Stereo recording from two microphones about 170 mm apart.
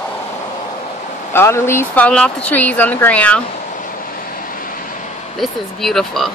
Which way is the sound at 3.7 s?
50° left (ahead or behind).